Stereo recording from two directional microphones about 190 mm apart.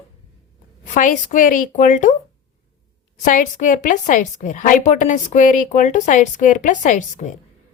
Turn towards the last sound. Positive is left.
turn(degrees=40)  # may be behind; listen again after turning